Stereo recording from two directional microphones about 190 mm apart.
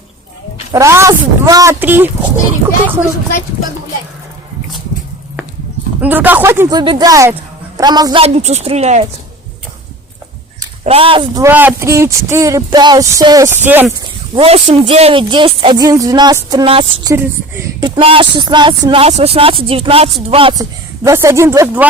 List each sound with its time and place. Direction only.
0.7 s music: 15° right (ahead or behind)
6.0 s music: 10° right (ahead or behind)
7.8 s speech: 20° right (ahead or behind)
8.2 s speech: 35° right (ahead or behind)
10.8 s speech: 30° right (ahead or behind)
11.4 s music: 10° right (ahead or behind)
14.3 s speech: 30° right (ahead or behind)
20.3 s music: 25° right (ahead or behind)